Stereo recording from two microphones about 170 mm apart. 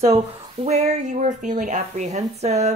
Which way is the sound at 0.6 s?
40° right (ahead or behind).